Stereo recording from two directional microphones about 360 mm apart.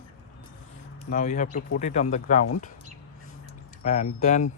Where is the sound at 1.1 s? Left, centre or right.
Centre.